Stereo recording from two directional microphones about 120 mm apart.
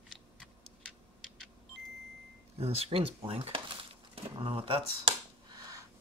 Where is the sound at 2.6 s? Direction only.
55° right (ahead or behind).